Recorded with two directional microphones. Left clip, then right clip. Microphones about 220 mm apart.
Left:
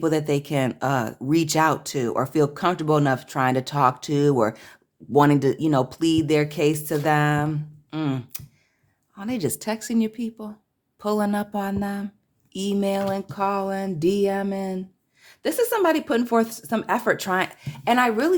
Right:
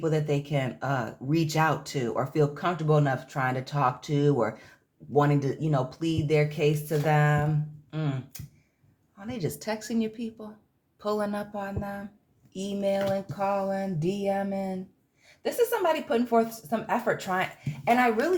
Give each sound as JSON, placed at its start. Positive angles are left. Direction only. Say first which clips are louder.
{"t": 0.0, "sound": "speech", "louder": "left 5 dB", "side_deg": 35}